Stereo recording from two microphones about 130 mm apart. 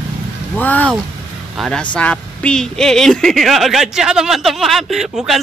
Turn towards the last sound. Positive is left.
turn(degrees=0)  # may be behind; listen again after turning